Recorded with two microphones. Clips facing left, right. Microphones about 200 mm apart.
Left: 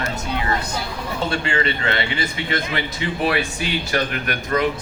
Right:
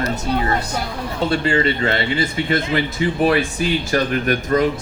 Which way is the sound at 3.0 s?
40° right (ahead or behind).